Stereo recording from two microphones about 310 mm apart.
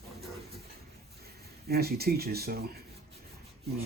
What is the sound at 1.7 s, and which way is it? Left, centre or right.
Speech, right.